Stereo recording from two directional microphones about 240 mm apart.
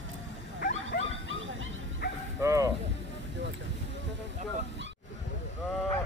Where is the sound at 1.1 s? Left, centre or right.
Right.